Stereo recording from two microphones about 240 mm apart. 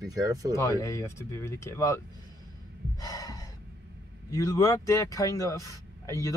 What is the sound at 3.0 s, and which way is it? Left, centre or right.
Gasp, centre.